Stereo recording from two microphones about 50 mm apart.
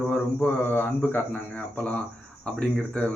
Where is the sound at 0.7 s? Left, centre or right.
Left.